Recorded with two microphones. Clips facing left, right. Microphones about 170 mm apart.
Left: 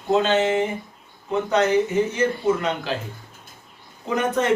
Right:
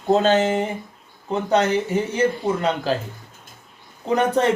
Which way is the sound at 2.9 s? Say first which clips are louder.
Right 5 dB; 40° right (ahead or behind).